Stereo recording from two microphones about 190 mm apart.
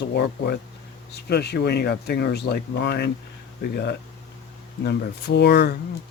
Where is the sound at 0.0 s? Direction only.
60° left (ahead or behind).